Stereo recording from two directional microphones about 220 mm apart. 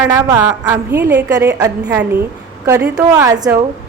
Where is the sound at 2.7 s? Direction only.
10° right (ahead or behind).